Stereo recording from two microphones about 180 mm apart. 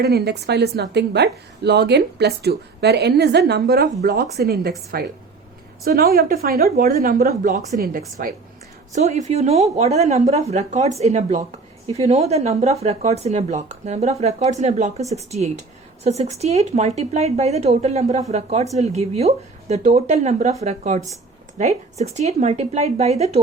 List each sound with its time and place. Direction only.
0.0 s a woman's voice: 65° right (ahead or behind)
8.9 s a woman's voice: 40° right (ahead or behind)